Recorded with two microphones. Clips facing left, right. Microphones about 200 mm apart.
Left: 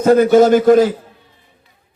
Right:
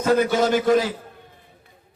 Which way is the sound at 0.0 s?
45° left (ahead or behind).